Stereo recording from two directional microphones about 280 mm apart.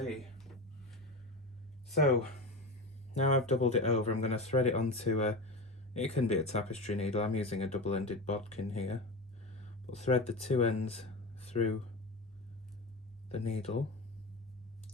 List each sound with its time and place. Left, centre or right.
0.0 s a sound: centre
1.9 s speech: centre
3.2 s speech: left
13.2 s speech: left